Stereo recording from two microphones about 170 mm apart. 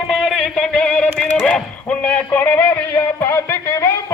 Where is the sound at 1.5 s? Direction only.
5° left (ahead or behind).